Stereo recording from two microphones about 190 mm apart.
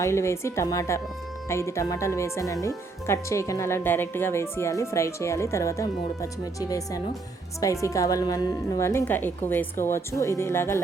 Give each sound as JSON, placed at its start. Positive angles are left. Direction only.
{"t": 0.0, "sound": "speech", "side_deg": 15}